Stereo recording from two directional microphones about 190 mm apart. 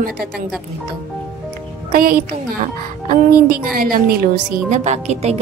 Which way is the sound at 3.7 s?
50° right (ahead or behind).